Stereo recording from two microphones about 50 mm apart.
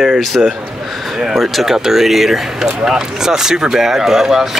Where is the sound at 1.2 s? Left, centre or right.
Centre.